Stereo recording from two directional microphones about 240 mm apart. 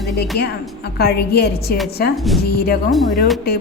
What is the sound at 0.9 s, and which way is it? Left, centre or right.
Speech, left.